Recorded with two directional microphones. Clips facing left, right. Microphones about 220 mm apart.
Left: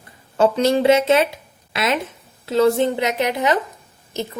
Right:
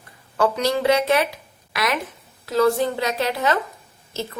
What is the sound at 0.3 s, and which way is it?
A woman's voice, 25° left (ahead or behind).